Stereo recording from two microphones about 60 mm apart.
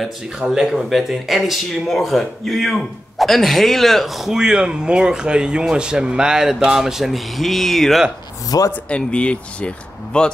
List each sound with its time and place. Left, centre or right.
0.0 s speech: centre
8.5 s speech: left
8.8 s speech: centre